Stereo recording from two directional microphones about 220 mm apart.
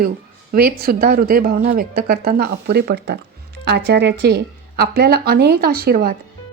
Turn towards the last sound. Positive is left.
turn(degrees=-40)  # may be behind; listen again after turning